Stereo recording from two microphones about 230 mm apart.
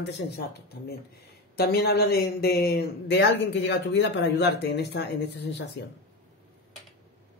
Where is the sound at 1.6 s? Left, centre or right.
Left.